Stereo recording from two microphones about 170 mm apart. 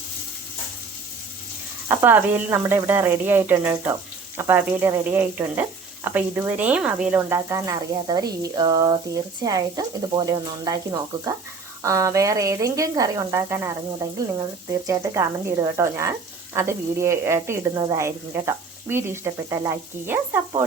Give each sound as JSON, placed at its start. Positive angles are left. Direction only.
{"t": 1.9, "sound": "speech", "side_deg": -15}
{"t": 11.8, "sound": "speech", "side_deg": -20}